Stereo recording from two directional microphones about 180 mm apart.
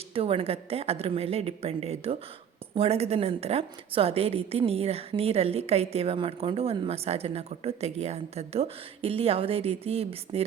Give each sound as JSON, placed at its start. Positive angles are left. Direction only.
{"t": 0.1, "sound": "a woman's voice", "side_deg": -30}